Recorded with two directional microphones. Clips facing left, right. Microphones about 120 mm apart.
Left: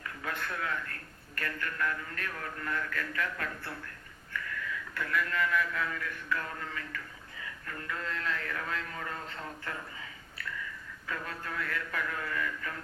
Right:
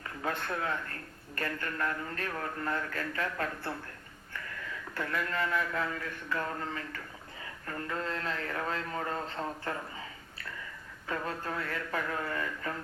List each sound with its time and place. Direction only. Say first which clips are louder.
0.2 s a man's voice: right 3 dB; 30° right (ahead or behind)
4.9 s a man's voice: left 1 dB; 30° right (ahead or behind)
11.0 s a man's voice: right 4 dB; 30° right (ahead or behind)